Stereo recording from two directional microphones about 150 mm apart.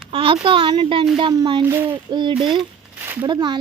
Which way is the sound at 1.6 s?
15° right (ahead or behind).